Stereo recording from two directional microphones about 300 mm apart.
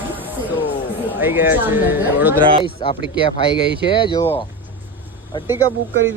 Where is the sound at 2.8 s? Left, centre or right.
Centre.